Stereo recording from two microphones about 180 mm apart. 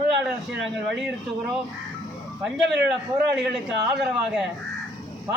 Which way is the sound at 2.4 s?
5° right (ahead or behind).